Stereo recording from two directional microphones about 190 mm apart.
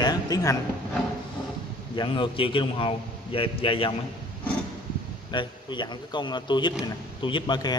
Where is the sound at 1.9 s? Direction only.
25° left (ahead or behind).